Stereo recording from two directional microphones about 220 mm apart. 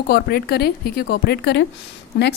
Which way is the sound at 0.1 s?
45° left (ahead or behind).